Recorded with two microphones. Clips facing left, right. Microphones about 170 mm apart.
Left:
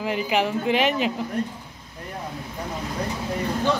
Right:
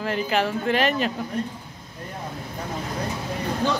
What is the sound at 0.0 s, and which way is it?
Speech, 10° left (ahead or behind).